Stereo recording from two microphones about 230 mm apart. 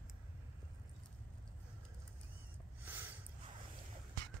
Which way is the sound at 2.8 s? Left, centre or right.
Centre.